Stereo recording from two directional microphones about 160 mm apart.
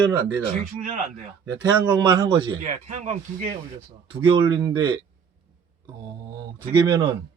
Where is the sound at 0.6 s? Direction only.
55° right (ahead or behind).